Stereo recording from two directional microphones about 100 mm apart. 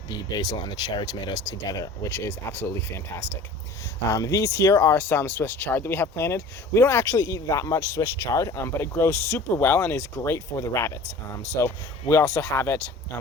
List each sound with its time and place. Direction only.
0.1 s speech: 45° left (ahead or behind); by 3.0 s 25° left (ahead or behind)
4.1 s speech: 35° left (ahead or behind)